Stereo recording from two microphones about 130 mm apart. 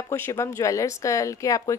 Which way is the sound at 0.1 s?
20° left (ahead or behind).